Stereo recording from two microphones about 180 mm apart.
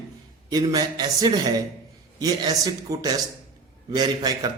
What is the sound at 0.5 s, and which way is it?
A man's voice, 20° right (ahead or behind).